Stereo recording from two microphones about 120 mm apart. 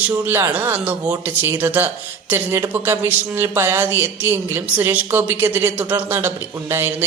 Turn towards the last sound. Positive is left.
turn(degrees=-20)  # may be behind; listen again after turning